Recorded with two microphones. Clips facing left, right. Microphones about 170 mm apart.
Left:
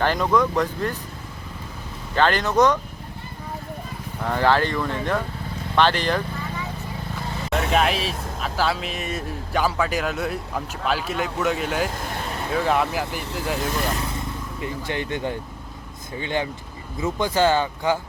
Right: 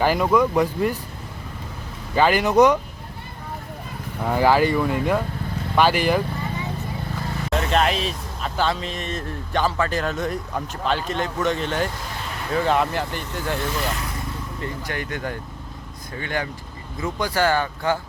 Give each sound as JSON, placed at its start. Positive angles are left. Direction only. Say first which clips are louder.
{"t": 0.0, "sound": "speech", "louder": "right 2 dB", "side_deg": -10}
{"t": 2.1, "sound": "speech", "louder": "right 3 dB", "side_deg": -10}
{"t": 4.2, "sound": "speech", "louder": "right 2 dB", "side_deg": -10}
{"t": 7.5, "sound": "speech", "louder": "even", "side_deg": 5}
{"t": 14.6, "sound": "speech", "louder": "left 2 dB", "side_deg": 20}